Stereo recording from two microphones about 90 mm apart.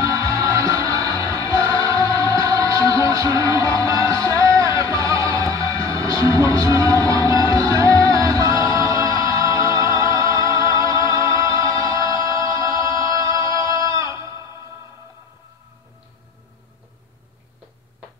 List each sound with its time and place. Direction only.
0.7 s music: 40° right (ahead or behind)